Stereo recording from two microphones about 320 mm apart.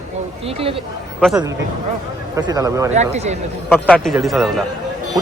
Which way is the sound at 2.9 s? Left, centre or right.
Right.